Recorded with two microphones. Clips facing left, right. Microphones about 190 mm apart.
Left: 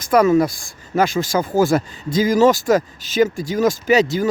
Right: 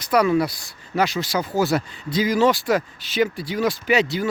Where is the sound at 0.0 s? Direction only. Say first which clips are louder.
Left 4 dB; 45° left (ahead or behind).